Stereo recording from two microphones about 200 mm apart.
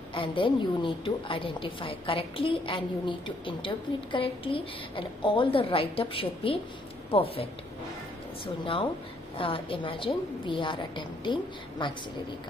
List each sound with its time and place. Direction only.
0.1 s a woman's voice: 25° left (ahead or behind)
9.4 s a woman's voice: 25° left (ahead or behind)